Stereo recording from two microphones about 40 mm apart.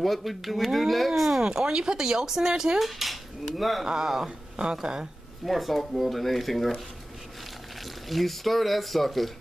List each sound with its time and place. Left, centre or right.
0.0 s speech: centre
1.4 s speech: centre
2.8 s speech: centre
3.8 s speech: centre
5.4 s speech: centre
8.1 s speech: centre